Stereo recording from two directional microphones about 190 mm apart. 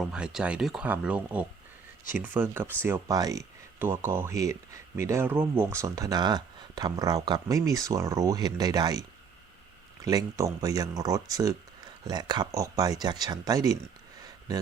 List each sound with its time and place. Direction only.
0.1 s speech: 5° right (ahead or behind)